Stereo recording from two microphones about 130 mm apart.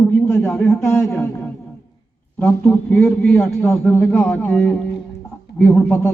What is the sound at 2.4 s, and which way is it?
A man's voice, 10° left (ahead or behind).